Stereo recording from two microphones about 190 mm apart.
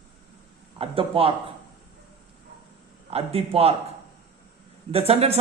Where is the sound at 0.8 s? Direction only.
30° right (ahead or behind).